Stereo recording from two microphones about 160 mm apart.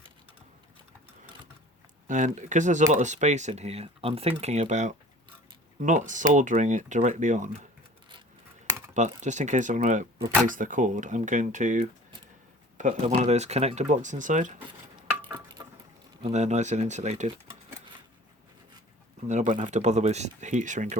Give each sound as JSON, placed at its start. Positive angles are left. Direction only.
{"t": 2.0, "sound": "speech", "side_deg": -50}
{"t": 9.0, "sound": "speech", "side_deg": -50}
{"t": 16.3, "sound": "speech", "side_deg": -45}
{"t": 19.3, "sound": "speech", "side_deg": -50}